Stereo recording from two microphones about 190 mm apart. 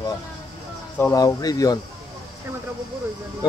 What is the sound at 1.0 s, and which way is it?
Speech, 15° left (ahead or behind).